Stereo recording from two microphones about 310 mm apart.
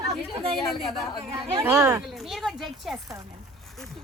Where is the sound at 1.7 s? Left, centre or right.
Centre.